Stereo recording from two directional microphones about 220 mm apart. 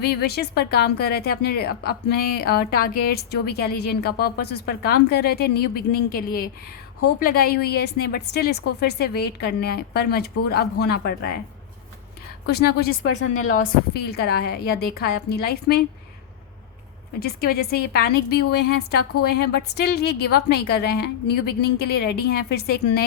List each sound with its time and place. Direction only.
0.0 s a woman's voice: 45° left (ahead or behind)
12.5 s a woman's voice: 45° left (ahead or behind)
13.1 s a woman's voice: 75° left (ahead or behind)
13.6 s a woman's voice: 45° left (ahead or behind)
17.2 s a woman's voice: 45° left (ahead or behind)